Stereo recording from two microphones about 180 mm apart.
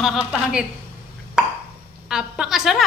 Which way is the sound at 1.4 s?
5° right (ahead or behind).